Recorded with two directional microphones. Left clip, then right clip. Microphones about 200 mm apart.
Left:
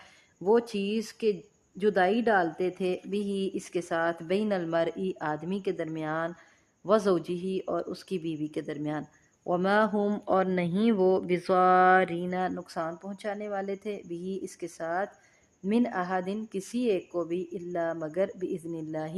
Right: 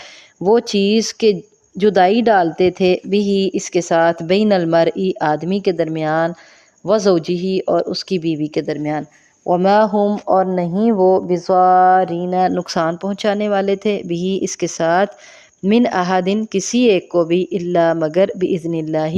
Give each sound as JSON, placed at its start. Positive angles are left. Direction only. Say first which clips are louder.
{"t": 0.4, "sound": "a woman's voice", "louder": "right 12 dB", "side_deg": -35}
{"t": 9.9, "sound": "speech", "louder": "right 12 dB", "side_deg": 0}
{"t": 11.0, "sound": "speech", "louder": "right 13 dB", "side_deg": -10}
{"t": 12.5, "sound": "a woman's voice", "louder": "right 16 dB", "side_deg": -40}